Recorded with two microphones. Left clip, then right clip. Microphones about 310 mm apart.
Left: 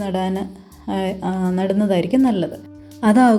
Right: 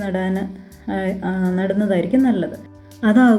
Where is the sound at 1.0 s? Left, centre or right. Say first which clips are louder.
Even; centre.